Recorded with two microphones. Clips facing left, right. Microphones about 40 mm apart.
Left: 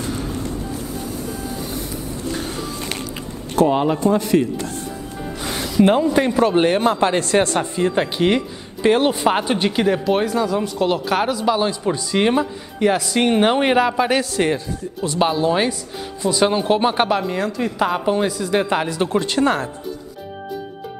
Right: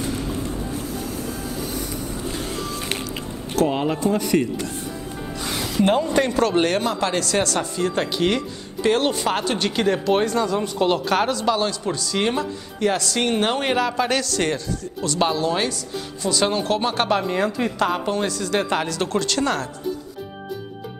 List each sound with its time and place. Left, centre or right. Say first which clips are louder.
0.9 s vehicle: left 1 dB; centre
4.2 s speech: left 3 dB; centre
4.6 s speech: left 2 dB; right
5.4 s music: left 1 dB; centre
5.9 s speech: left 1 dB; centre
6.8 s speech: left 5 dB; left
17.1 s speech: even; centre
17.7 s speech: left 6 dB; centre
18.9 s speech: left 3 dB; centre